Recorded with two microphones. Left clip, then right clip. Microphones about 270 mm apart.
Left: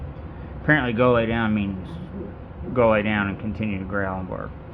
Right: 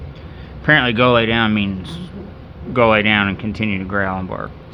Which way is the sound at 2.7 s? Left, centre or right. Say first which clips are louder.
Right 6 dB; right.